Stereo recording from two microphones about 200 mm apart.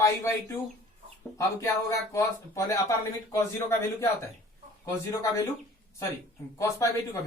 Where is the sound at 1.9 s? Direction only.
15° left (ahead or behind).